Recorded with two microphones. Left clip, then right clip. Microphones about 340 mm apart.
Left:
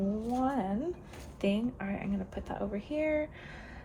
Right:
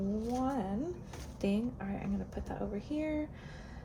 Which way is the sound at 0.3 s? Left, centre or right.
Centre.